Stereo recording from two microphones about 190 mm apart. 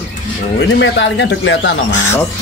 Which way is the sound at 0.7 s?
70° left (ahead or behind).